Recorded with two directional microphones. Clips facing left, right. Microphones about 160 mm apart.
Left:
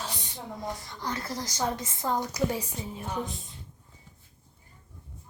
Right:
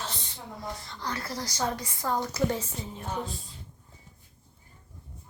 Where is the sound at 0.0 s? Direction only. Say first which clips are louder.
Left 1 dB; 15° left (ahead or behind).